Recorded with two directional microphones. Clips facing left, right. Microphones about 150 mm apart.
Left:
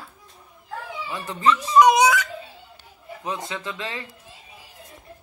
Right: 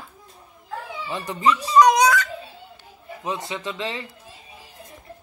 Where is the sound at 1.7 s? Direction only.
10° left (ahead or behind).